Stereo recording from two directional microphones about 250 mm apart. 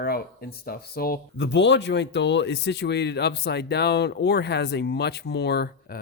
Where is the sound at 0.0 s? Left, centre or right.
Left.